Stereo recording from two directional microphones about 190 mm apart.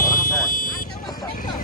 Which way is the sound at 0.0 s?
45° left (ahead or behind).